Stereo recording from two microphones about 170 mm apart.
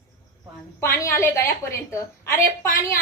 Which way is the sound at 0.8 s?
15° left (ahead or behind).